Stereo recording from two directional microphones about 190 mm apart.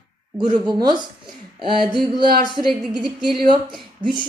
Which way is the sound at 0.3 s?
25° right (ahead or behind).